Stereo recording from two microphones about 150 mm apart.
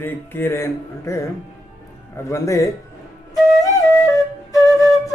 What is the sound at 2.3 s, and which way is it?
Speech, 20° left (ahead or behind).